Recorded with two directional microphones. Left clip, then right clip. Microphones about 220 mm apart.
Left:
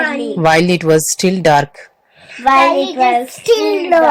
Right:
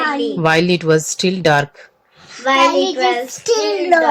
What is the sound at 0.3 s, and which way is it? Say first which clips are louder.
Speech: left 5 dB; 5° left (ahead or behind).